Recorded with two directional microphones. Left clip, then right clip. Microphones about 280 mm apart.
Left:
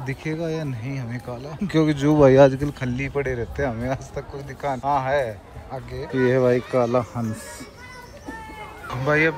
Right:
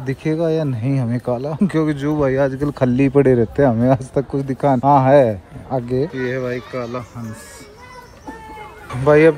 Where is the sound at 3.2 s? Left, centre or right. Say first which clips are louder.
Right 12 dB; right.